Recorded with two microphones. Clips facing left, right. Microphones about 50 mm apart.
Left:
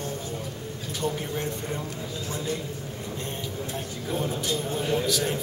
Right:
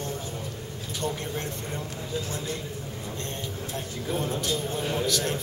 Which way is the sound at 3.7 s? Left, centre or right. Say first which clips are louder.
Right 1 dB; centre.